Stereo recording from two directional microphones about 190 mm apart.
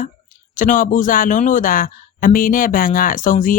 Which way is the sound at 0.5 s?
45° left (ahead or behind).